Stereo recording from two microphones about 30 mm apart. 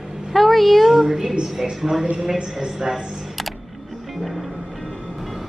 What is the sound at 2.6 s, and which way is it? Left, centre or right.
Speech, right.